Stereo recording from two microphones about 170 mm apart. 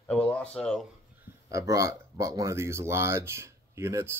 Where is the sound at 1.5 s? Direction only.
20° right (ahead or behind).